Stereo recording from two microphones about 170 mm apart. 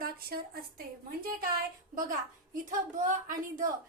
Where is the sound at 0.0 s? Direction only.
60° right (ahead or behind).